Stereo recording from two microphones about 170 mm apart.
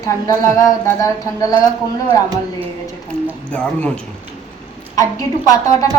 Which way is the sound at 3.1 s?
15° right (ahead or behind).